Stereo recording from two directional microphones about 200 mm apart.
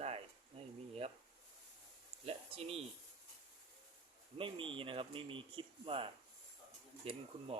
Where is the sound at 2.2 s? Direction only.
30° right (ahead or behind).